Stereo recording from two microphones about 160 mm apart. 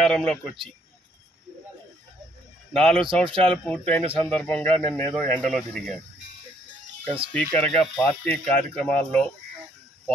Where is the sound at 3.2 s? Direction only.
35° right (ahead or behind).